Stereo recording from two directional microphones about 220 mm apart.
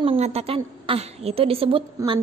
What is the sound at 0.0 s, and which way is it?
A woman's voice, 25° right (ahead or behind).